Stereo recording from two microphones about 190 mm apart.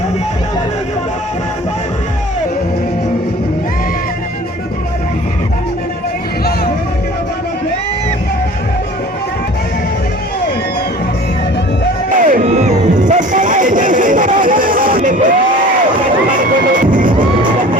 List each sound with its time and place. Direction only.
12.1 s music: 40° right (ahead or behind)
16.0 s crowd: 45° right (ahead or behind)